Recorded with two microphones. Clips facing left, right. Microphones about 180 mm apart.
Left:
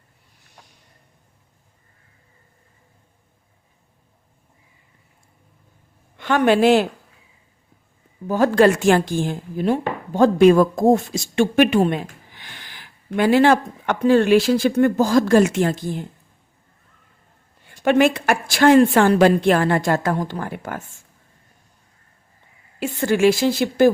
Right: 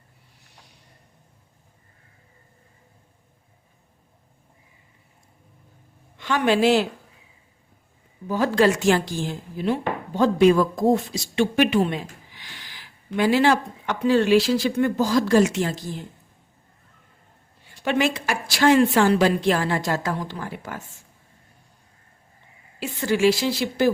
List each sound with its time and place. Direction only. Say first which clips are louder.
6.1 s speech: left 4 dB; 55° left (ahead or behind)
8.3 s speech: left 4 dB; 50° left (ahead or behind)
17.7 s speech: left 6 dB; 50° left (ahead or behind)
22.8 s speech: left 3 dB; 50° left (ahead or behind)